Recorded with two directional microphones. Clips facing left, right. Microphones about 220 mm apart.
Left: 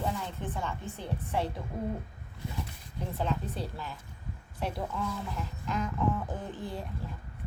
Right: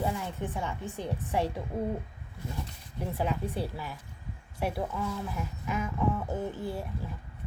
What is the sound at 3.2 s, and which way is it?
Speech, 10° right (ahead or behind).